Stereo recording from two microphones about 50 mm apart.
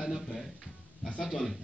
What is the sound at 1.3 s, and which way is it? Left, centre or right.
Speech, centre.